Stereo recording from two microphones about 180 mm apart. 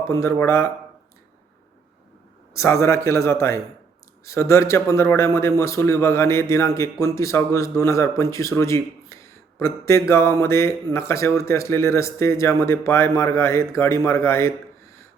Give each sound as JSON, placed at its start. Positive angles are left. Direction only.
{"t": 0.0, "sound": "speech", "side_deg": 15}
{"t": 2.8, "sound": "speech", "side_deg": 15}